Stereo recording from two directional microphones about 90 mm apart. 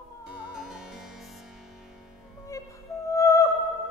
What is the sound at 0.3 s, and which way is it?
Music, 10° right (ahead or behind).